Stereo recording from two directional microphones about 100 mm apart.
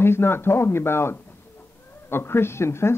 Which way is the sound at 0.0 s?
25° left (ahead or behind).